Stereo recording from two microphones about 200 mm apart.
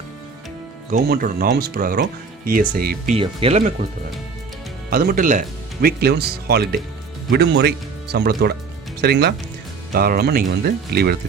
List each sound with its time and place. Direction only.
0.9 s speech: 45° right (ahead or behind)
3.2 s speech: 30° right (ahead or behind)
4.9 s speech: 50° right (ahead or behind)